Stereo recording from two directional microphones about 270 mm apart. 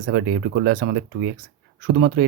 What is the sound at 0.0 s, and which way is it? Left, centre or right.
Speech, right.